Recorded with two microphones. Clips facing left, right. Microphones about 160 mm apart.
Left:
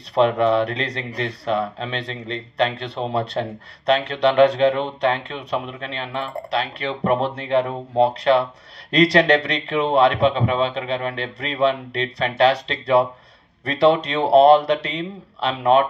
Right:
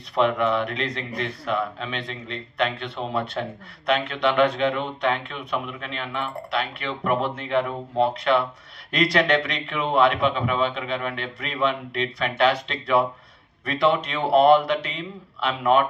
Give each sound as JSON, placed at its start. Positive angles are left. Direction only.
{"t": 0.1, "sound": "speech", "side_deg": 35}